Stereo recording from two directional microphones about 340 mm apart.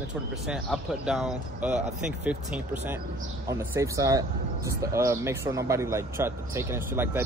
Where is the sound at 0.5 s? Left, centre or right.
Centre.